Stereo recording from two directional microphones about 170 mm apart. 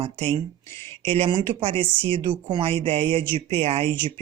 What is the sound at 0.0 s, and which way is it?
Speech, 35° right (ahead or behind).